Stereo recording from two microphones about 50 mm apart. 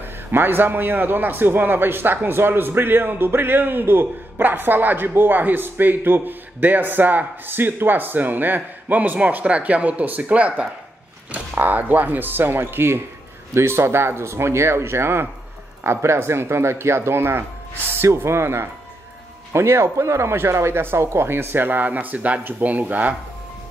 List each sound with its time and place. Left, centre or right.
0.0 s a man's voice: right